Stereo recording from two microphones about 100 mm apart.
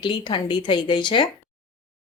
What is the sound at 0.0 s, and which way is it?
A woman's voice, 55° left (ahead or behind).